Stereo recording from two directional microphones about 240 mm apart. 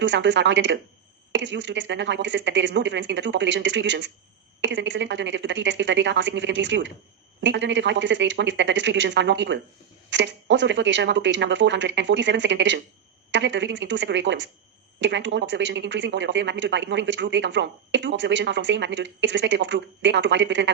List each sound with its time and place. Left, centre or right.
0.0 s speech: right